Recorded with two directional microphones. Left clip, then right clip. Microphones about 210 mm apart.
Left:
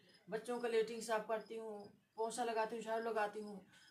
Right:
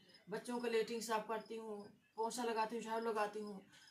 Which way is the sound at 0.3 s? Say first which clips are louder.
Left 1 dB; 15° left (ahead or behind).